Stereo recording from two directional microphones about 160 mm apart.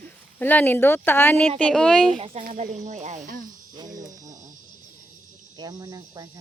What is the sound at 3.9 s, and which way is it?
Music, 55° right (ahead or behind).